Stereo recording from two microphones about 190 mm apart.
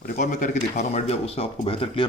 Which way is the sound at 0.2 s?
40° left (ahead or behind).